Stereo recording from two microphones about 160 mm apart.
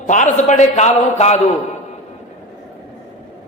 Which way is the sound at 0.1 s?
50° left (ahead or behind).